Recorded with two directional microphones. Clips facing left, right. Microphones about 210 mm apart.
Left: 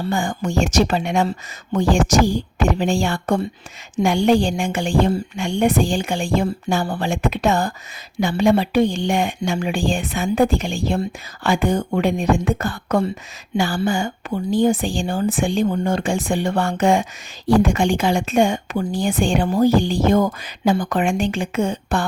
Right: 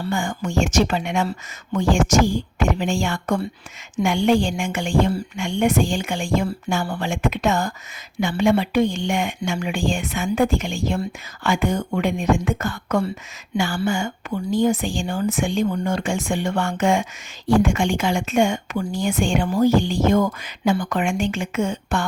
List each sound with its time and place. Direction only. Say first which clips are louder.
0.1 s speech: left 1 dB; 35° left (ahead or behind)